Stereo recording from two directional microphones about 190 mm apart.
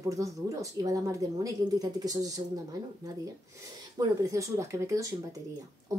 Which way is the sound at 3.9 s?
15° right (ahead or behind).